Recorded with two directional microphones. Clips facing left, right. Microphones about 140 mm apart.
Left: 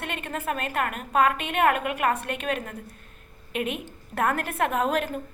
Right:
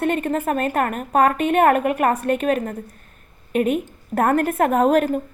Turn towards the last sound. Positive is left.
turn(degrees=-45)  # may be behind; listen again after turning